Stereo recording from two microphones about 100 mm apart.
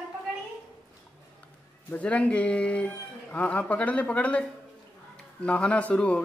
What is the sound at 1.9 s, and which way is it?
Speech, 15° left (ahead or behind).